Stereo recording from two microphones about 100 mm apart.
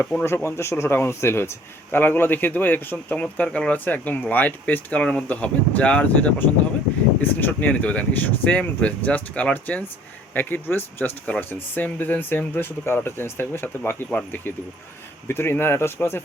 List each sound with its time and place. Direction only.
0.2 s speech: 20° left (ahead or behind)